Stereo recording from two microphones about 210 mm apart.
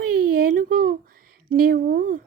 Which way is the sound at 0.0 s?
45° right (ahead or behind).